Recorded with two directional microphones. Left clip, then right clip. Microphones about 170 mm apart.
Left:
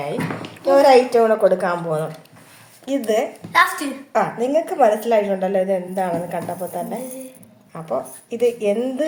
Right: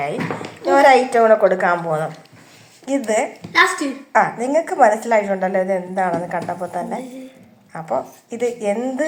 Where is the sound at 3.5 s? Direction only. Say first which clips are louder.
Right 1 dB; 80° left.